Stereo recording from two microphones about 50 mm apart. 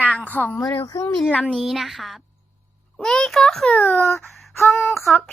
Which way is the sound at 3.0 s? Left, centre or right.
Centre.